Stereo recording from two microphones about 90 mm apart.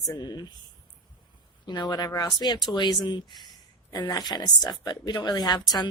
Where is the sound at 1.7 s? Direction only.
50° left (ahead or behind).